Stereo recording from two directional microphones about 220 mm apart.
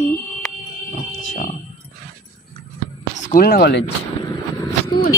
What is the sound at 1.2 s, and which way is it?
Speech, 35° left (ahead or behind).